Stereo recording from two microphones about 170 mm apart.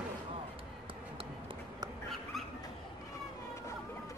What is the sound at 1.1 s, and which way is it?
Run, 30° right (ahead or behind).